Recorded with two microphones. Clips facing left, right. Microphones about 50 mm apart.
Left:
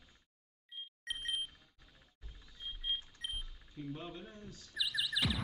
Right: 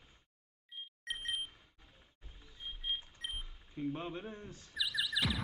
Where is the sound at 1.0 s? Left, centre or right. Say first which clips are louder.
Even; centre.